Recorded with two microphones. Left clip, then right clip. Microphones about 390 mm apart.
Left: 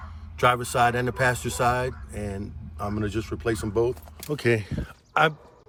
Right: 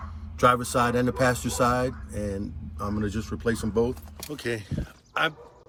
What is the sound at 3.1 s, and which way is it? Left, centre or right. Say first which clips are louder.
Speech: left 1 dB; centre.